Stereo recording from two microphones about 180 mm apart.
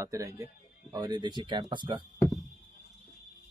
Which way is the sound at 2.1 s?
15° left (ahead or behind).